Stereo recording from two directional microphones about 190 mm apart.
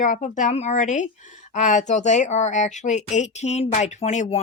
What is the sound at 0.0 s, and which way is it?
Speech, 40° left (ahead or behind).